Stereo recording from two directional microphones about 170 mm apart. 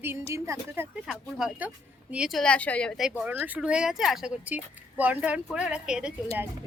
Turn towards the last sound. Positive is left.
turn(degrees=-5)  # may be behind; listen again after turning